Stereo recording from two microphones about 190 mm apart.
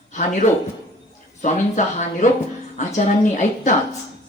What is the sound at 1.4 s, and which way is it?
Speech, 40° left (ahead or behind).